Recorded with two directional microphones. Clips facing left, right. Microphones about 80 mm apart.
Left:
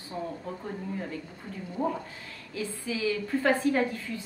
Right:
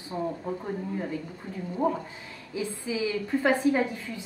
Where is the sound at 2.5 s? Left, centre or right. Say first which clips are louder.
Right 3 dB; centre.